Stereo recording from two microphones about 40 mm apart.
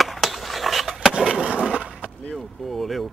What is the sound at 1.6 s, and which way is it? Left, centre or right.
Skateboard, right.